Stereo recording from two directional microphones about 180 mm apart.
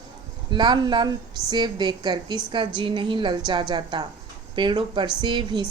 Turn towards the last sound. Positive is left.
turn(degrees=-25)  # may be behind; listen again after turning